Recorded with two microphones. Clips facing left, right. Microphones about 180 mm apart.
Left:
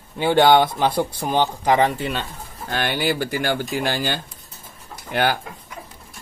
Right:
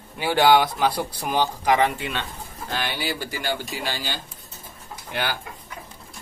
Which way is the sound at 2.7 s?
55° left (ahead or behind).